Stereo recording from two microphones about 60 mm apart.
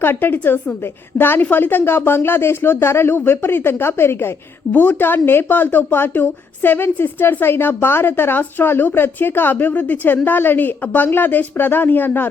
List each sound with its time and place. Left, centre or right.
0.0 s speech: left
4.7 s speech: left